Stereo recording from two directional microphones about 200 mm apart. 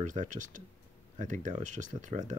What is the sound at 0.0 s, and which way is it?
Speech, 40° right (ahead or behind).